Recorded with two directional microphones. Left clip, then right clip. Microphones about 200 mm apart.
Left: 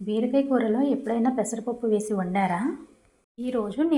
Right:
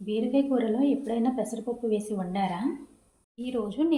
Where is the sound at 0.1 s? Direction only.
20° left (ahead or behind).